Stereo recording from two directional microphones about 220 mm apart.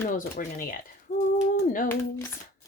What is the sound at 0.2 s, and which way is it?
Speech, 40° left (ahead or behind).